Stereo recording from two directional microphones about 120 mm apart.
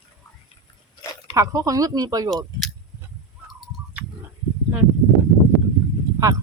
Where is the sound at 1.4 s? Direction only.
30° right (ahead or behind).